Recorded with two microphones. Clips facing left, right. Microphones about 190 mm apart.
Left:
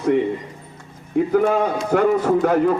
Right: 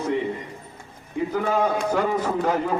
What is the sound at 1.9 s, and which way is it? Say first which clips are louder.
Speech: left 7 dB; 60° left (ahead or behind).